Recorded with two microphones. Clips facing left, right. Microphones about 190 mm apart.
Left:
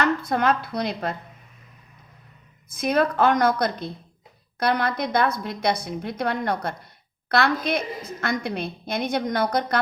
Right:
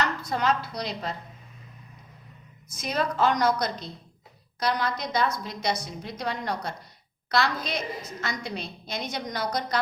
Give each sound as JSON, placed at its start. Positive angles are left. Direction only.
{"t": 0.0, "sound": "speech", "side_deg": 55}
{"t": 2.6, "sound": "a woman's voice", "side_deg": 55}